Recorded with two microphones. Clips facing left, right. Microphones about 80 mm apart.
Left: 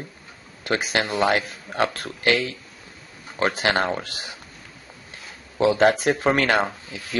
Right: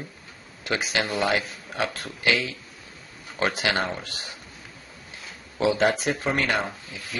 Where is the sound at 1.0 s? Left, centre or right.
Left.